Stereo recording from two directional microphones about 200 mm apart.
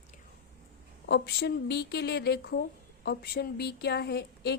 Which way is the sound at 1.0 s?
55° left (ahead or behind).